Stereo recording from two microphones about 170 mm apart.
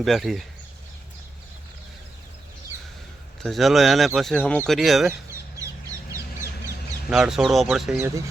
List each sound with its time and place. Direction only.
0.0 s speech: centre (ahead or behind)
3.4 s speech: centre (ahead or behind)
7.1 s speech: 5° right (ahead or behind)